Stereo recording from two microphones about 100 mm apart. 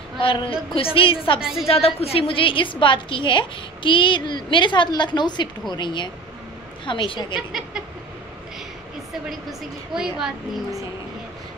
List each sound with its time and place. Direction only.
0.2 s a woman's voice: 60° left (ahead or behind)
1.4 s a woman's voice: 5° right (ahead or behind)
1.7 s a woman's voice: 85° left; by 7.3 s 55° left (ahead or behind)
7.3 s a woman's voice: 5° right (ahead or behind)
9.5 s a woman's voice: 5° right (ahead or behind)